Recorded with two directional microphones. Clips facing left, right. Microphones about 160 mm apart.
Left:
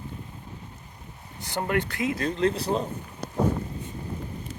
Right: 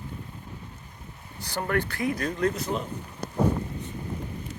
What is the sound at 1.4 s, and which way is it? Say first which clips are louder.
Speech: left 1 dB; 20° left (ahead or behind).